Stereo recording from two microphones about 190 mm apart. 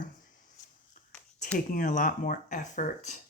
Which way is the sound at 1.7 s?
45° left (ahead or behind).